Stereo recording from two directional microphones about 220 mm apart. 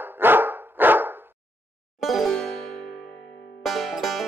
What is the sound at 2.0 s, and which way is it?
Music, centre (ahead or behind).